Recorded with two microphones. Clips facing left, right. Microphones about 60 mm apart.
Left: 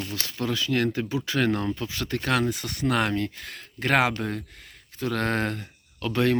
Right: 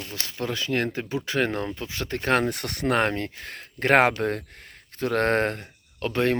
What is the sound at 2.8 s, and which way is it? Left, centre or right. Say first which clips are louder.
Speech: right 1 dB; right.